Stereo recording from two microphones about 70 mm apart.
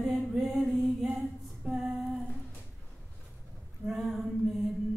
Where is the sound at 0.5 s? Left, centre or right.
Centre.